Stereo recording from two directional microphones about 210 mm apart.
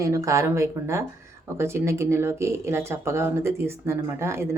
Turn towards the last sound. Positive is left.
turn(degrees=-10)  # may be behind; listen again after turning